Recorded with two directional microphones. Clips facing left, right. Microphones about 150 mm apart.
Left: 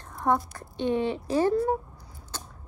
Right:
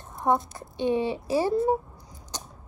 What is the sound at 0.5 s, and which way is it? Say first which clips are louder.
Speech: right 1 dB; 15° right (ahead or behind).